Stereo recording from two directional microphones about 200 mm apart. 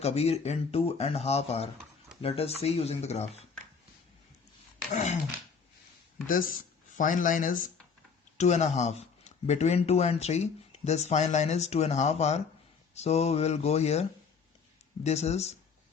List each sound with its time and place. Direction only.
0.0 s speech: 30° left (ahead or behind)
4.9 s speech: 35° left (ahead or behind)
6.9 s speech: 40° left (ahead or behind)